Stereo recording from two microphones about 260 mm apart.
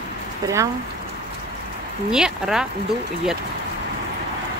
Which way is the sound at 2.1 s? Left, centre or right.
Centre.